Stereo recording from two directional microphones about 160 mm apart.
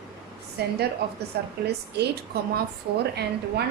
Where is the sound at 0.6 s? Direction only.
90° right.